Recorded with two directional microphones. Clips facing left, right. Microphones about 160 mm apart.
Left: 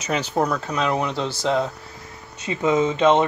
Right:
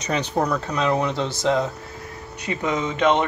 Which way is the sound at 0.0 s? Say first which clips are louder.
Left 1 dB; 5° left (ahead or behind).